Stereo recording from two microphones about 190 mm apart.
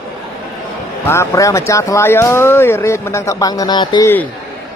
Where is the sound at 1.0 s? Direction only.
15° left (ahead or behind).